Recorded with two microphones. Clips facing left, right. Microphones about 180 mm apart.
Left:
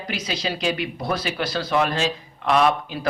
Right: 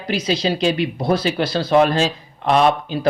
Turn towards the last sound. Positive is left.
turn(degrees=-30)  # may be behind; listen again after turning